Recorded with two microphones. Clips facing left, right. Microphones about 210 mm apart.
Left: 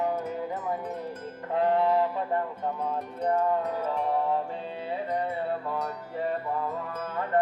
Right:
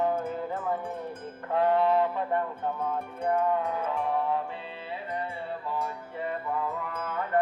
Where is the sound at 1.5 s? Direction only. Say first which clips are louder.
Even; 30° left (ahead or behind).